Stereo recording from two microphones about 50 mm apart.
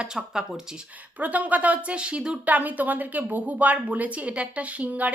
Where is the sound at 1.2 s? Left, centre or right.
Right.